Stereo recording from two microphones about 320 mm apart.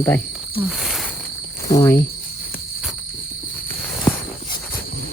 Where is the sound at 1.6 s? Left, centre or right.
Centre.